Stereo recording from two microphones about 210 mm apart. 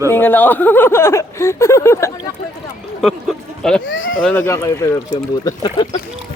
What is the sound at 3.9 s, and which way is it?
Speech, 65° left (ahead or behind).